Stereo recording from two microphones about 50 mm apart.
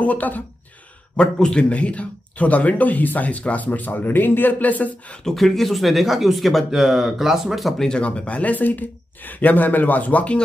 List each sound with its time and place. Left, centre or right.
0.0 s speech: left
1.1 s a man's voice: centre
5.3 s speech: centre
8.0 s speech: left